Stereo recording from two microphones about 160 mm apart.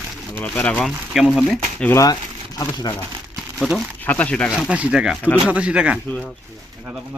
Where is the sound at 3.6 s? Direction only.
Centre (ahead or behind).